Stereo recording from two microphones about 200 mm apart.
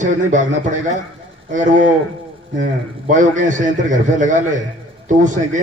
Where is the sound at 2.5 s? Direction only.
40° right (ahead or behind).